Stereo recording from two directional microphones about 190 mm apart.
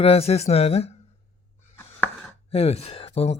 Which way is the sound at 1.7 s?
10° left (ahead or behind).